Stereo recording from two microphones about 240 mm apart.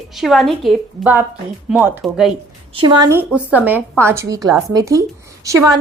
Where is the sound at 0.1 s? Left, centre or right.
Centre.